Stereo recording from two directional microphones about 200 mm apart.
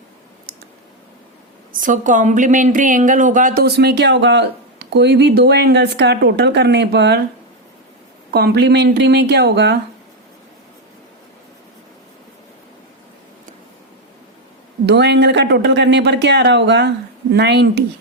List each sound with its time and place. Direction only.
1.7 s a woman's voice: 40° right (ahead or behind); by 7.2 s 55° right (ahead or behind)
8.3 s a woman's voice: 55° right (ahead or behind)
14.8 s a woman's voice: 60° right (ahead or behind)